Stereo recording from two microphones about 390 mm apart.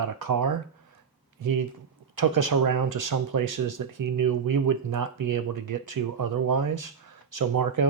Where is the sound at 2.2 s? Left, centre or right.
Right.